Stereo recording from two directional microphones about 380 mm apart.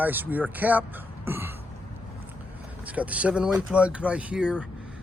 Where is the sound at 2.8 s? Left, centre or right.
Centre.